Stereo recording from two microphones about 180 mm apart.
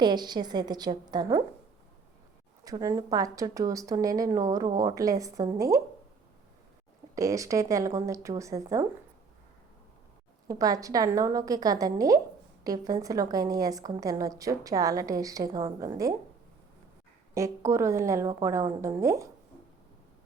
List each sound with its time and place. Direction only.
0.0 s a woman's voice: 25° right (ahead or behind)
2.6 s a woman's voice: 20° right (ahead or behind)
7.2 s a woman's voice: 20° right (ahead or behind)
10.5 s a woman's voice: 20° right (ahead or behind)
17.3 s a woman's voice: 15° right (ahead or behind)